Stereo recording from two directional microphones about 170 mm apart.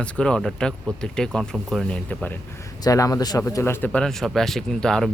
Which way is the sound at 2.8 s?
20° left (ahead or behind).